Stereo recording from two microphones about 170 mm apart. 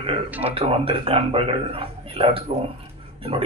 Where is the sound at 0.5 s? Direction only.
35° right (ahead or behind).